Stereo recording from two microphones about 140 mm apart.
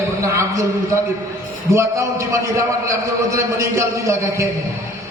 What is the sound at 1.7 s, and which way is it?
A man's voice, 20° right (ahead or behind).